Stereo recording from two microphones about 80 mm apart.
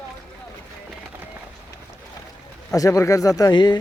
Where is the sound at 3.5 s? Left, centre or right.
Left.